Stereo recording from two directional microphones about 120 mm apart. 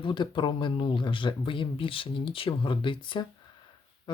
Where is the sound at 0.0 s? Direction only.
45° left (ahead or behind).